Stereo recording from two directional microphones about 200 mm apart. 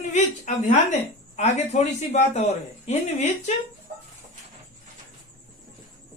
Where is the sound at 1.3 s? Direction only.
35° left (ahead or behind).